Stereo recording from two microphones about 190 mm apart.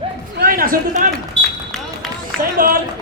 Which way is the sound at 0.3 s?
50° right (ahead or behind).